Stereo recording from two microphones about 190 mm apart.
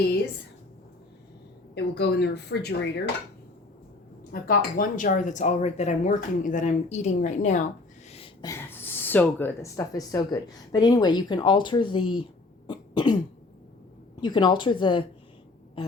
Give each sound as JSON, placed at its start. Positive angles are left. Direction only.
{"t": 1.7, "sound": "a woman's voice", "side_deg": 60}
{"t": 4.3, "sound": "speech", "side_deg": 45}
{"t": 8.1, "sound": "a sound", "side_deg": 30}
{"t": 8.4, "sound": "speech", "side_deg": 10}
{"t": 12.6, "sound": "cough", "side_deg": 25}
{"t": 14.2, "sound": "speech", "side_deg": 20}